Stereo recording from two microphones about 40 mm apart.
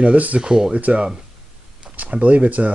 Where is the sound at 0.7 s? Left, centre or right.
Right.